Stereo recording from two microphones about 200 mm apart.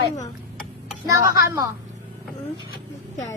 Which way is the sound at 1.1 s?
15° right (ahead or behind).